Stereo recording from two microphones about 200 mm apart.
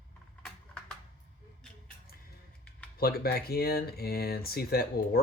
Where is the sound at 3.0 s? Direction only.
50° left (ahead or behind).